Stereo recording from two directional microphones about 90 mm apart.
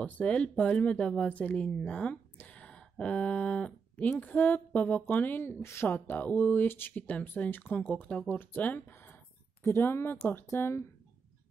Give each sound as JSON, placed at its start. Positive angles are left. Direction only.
{"t": 0.0, "sound": "speech", "side_deg": 15}